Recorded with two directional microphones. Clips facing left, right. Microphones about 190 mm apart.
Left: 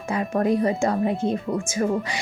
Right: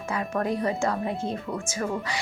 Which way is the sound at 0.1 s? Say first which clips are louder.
Left 6 dB; 25° left (ahead or behind).